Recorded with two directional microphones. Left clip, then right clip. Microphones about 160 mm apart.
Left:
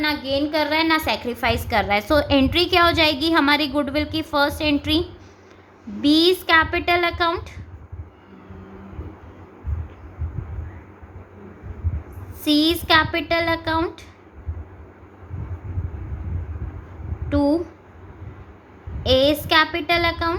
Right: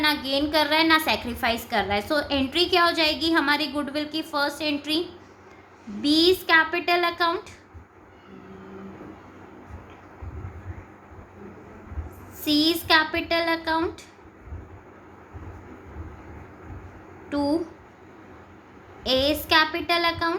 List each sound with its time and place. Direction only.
0.0 s a woman's voice: 10° left (ahead or behind)
12.5 s a woman's voice: 25° left (ahead or behind)
17.2 s speech: 20° left (ahead or behind)
19.0 s a woman's voice: 25° left (ahead or behind)